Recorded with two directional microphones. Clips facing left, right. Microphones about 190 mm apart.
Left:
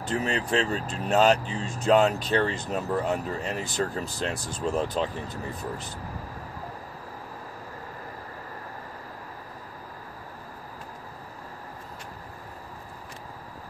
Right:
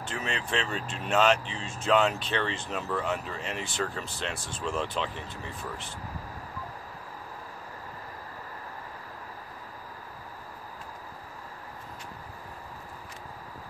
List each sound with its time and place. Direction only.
0.0 s speech: 35° left (ahead or behind)